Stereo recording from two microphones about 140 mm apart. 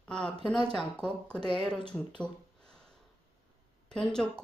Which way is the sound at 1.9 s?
5° left (ahead or behind).